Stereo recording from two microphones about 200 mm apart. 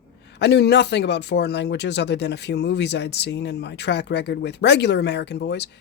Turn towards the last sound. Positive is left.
turn(degrees=55)  # may be behind; listen again after turning